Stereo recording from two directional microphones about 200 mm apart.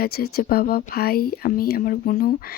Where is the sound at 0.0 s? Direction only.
50° left (ahead or behind).